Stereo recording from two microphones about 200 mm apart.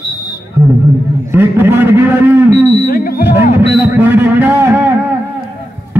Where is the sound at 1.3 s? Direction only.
10° right (ahead or behind).